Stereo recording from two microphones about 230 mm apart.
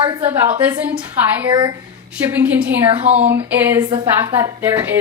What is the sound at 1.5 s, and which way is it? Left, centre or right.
Speech, centre.